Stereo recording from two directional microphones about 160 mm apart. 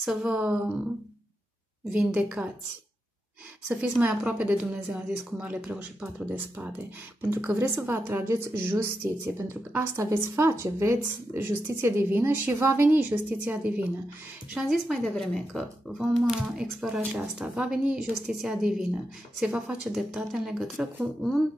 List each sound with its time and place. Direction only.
0.0 s speech: 5° right (ahead or behind)
1.9 s a woman's voice: 10° right (ahead or behind)
3.6 s a woman's voice: 10° right (ahead or behind)